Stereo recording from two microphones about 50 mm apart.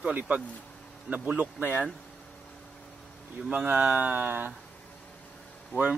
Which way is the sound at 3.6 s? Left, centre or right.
Right.